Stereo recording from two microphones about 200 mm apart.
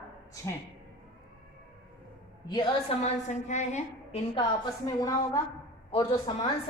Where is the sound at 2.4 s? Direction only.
25° left (ahead or behind).